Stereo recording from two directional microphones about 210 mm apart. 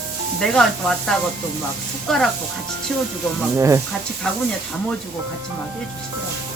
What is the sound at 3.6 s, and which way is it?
Speech, 15° right (ahead or behind).